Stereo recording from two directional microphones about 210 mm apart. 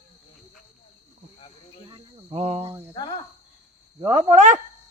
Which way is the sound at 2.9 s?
20° left (ahead or behind).